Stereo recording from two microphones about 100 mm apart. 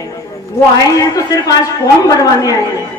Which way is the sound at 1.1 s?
35° left (ahead or behind).